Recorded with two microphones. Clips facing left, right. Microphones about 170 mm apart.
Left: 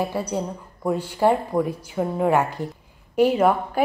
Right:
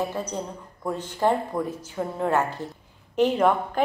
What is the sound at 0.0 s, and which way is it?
A woman's voice, 10° left (ahead or behind).